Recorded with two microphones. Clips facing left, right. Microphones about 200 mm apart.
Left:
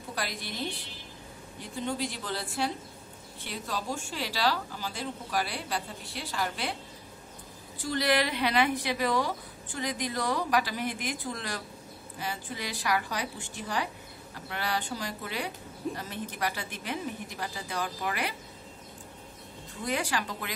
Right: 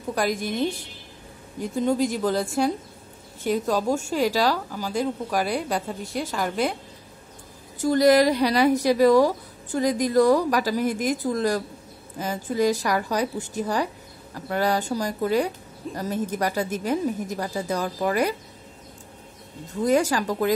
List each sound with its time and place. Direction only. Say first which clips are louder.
0.1 s speech: right 12 dB; 45° right (ahead or behind)
7.8 s a woman's voice: right 11 dB; 45° right (ahead or behind)
19.8 s speech: right 11 dB; 45° right (ahead or behind)